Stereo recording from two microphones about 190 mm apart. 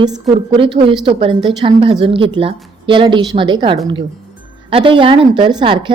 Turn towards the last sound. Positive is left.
turn(degrees=-25)  # may be behind; listen again after turning